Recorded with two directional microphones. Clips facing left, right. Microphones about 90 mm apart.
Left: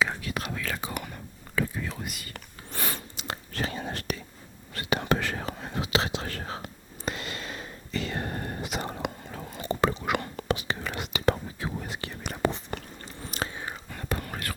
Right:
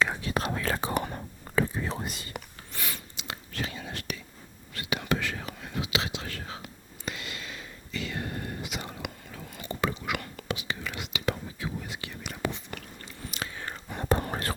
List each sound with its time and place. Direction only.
0.2 s whispering: 30° right (ahead or behind)
2.7 s whispering: 40° left (ahead or behind)
13.3 s biting: 35° left (ahead or behind)
13.6 s whispering: 10° left (ahead or behind)
13.9 s whispering: 30° right (ahead or behind)